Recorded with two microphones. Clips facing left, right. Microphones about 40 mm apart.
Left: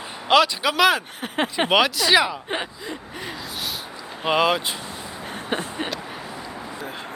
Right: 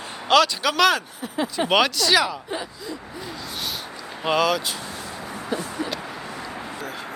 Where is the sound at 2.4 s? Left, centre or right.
Left.